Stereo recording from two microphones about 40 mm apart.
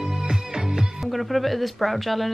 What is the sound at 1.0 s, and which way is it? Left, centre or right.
Speech, centre.